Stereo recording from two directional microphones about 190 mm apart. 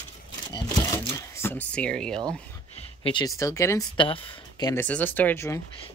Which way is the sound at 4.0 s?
30° left (ahead or behind).